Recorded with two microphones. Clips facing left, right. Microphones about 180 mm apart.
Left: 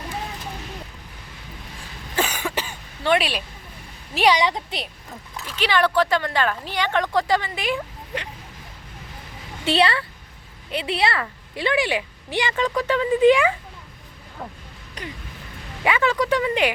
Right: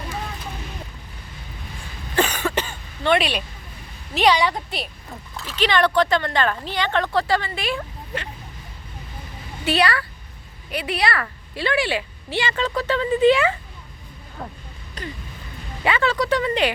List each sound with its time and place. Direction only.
2.1 s throat clearing: 10° left (ahead or behind)
4.1 s a woman's voice: 10° left (ahead or behind)
5.5 s a woman's voice: 10° left (ahead or behind)
9.6 s a woman's voice: 25° left (ahead or behind)
15.0 s a sound: 15° left (ahead or behind)
15.8 s a woman's voice: 10° left (ahead or behind)